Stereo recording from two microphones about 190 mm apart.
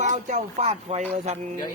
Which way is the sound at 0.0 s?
40° right (ahead or behind).